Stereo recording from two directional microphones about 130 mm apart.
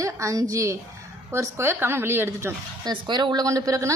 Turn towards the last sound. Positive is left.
turn(degrees=-25)  # may be behind; listen again after turning